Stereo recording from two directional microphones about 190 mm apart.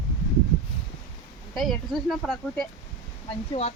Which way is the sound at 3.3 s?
35° left (ahead or behind).